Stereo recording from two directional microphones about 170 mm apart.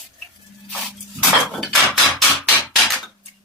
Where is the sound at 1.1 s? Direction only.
Centre (ahead or behind).